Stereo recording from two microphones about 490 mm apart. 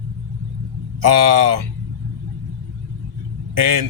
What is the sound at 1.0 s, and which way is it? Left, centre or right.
Speech, right.